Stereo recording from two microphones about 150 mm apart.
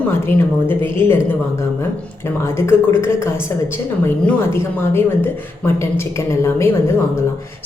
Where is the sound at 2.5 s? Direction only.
15° left (ahead or behind).